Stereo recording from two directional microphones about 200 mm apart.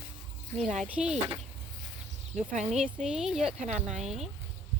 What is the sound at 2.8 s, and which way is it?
Speech, 5° right (ahead or behind).